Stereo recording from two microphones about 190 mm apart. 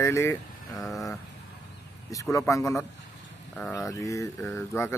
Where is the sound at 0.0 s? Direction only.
15° left (ahead or behind).